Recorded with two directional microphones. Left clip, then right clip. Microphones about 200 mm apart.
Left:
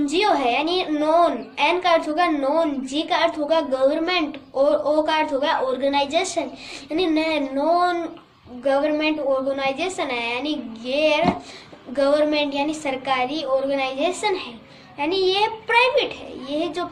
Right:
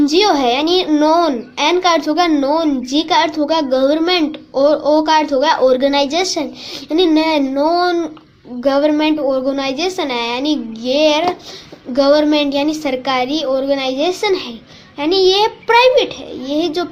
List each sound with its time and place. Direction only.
0.0 s a woman's voice: 50° right (ahead or behind)